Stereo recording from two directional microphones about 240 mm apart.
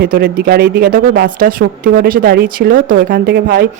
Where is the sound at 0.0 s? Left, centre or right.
Right.